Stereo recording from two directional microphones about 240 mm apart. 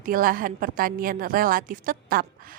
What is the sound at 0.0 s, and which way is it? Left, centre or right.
A woman's voice, right.